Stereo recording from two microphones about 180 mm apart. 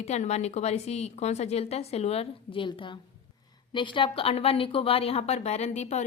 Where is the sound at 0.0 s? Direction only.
40° left (ahead or behind).